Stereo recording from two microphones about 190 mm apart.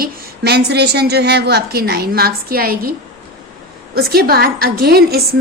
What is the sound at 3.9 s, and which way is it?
A woman's voice, 55° right (ahead or behind).